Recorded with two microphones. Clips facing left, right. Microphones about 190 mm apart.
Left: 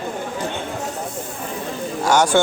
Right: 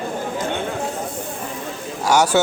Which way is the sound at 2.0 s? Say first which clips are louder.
Even; 10° right (ahead or behind).